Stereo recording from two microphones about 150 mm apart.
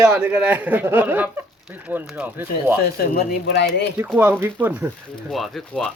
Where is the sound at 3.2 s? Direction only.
90° left.